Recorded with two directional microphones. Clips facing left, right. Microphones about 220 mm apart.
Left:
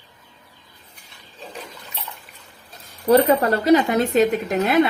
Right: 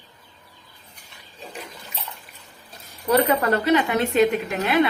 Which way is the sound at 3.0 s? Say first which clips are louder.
Left 4 dB; 35° left (ahead or behind).